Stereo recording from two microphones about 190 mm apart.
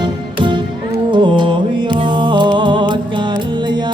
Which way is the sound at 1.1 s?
25° right (ahead or behind).